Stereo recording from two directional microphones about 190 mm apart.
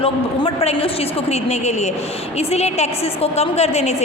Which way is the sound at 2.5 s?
35° left (ahead or behind).